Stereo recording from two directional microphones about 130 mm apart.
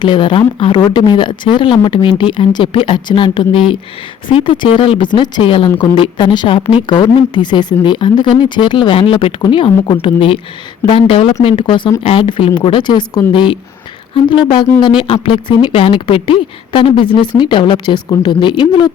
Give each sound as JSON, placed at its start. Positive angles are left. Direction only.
{"t": 0.0, "sound": "speech", "side_deg": 40}
{"t": 14.5, "sound": "speech", "side_deg": 35}